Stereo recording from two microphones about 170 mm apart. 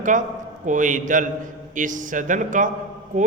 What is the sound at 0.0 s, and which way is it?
A man's voice, 50° right (ahead or behind).